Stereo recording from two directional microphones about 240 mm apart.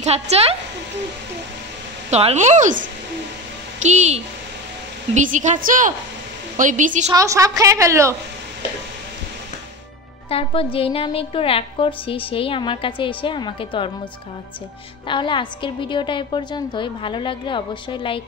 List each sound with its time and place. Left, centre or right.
0.0 s a woman's voice: right
2.0 s a woman's voice: right
7.1 s a woman's voice: centre
10.3 s a woman's voice: left
15.0 s a woman's voice: centre